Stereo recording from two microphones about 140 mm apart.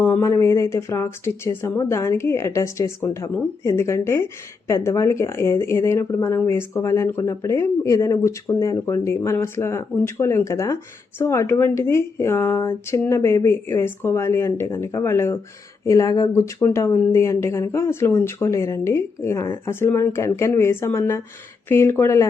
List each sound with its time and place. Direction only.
0.0 s speech: 20° left (ahead or behind)